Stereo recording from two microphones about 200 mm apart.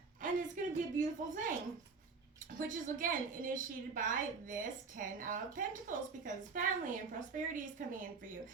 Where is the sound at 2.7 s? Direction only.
45° right (ahead or behind).